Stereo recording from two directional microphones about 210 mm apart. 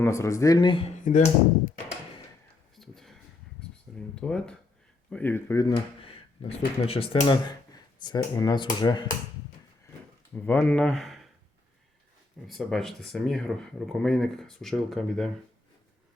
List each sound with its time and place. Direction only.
0.0 s speech: 15° left (ahead or behind)
1.0 s speech: 35° left (ahead or behind)
2.7 s a sound: centre (ahead or behind)
4.1 s speech: 5° left (ahead or behind); by 9.0 s 20° left (ahead or behind)
10.3 s speech: 10° left (ahead or behind)
12.5 s speech: centre (ahead or behind)